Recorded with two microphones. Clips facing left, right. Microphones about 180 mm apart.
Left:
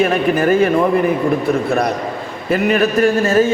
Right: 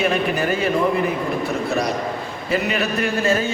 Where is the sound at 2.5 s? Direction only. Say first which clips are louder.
Left 7 dB; 50° left (ahead or behind).